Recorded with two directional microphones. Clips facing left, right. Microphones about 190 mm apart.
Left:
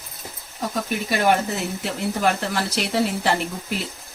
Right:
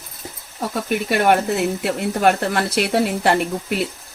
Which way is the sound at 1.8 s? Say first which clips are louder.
Right 3 dB; 60° right (ahead or behind).